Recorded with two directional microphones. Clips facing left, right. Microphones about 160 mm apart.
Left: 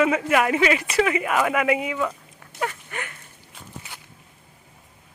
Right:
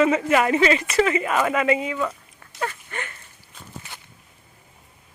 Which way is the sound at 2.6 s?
10° left (ahead or behind).